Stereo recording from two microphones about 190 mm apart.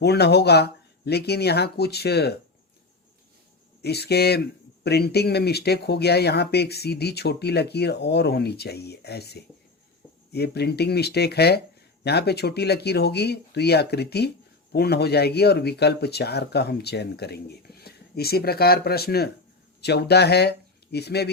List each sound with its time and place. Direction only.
0.0 s speech: 60° left (ahead or behind)
3.8 s speech: 60° left (ahead or behind)